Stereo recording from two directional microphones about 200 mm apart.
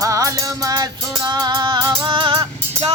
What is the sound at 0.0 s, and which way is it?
Music, 15° right (ahead or behind).